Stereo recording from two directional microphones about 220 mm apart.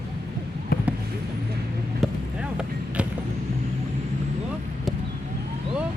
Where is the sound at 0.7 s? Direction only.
40° left (ahead or behind).